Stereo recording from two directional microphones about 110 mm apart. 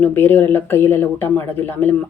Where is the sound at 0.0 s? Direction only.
15° left (ahead or behind).